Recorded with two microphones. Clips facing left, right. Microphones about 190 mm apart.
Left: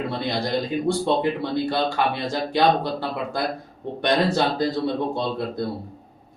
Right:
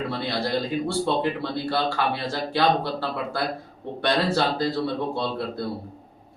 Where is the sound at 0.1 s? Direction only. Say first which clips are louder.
Left 1 dB; 15° left (ahead or behind).